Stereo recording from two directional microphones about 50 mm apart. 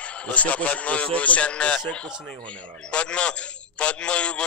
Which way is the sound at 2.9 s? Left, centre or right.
Left.